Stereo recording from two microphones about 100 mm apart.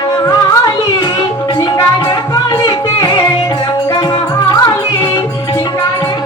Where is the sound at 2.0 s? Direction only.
35° left (ahead or behind).